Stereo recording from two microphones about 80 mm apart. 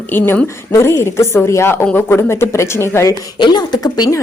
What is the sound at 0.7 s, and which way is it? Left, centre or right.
A woman's voice, left.